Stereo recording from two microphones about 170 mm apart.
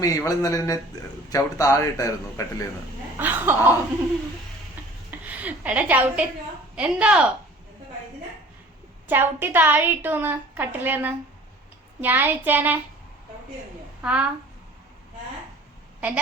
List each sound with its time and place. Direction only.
0.0 s speech: 20° left (ahead or behind)
3.2 s a woman's voice: 10° right (ahead or behind)
5.2 s a sound: 10° right (ahead or behind)
6.7 s a woman's voice: 5° right (ahead or behind)
9.0 s a woman's voice: 10° right (ahead or behind)
14.0 s a woman's voice: 5° right (ahead or behind)
16.0 s a woman's voice: 10° right (ahead or behind)